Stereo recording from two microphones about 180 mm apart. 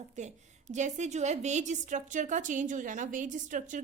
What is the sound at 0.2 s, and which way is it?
A woman's voice, 40° right (ahead or behind).